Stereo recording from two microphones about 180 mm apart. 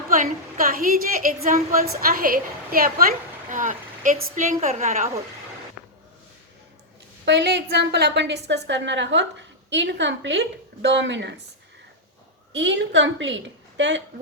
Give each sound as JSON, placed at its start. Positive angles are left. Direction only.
{"t": 0.1, "sound": "a woman's voice", "side_deg": -50}
{"t": 7.3, "sound": "a woman's voice", "side_deg": -70}
{"t": 12.5, "sound": "a woman's voice", "side_deg": -80}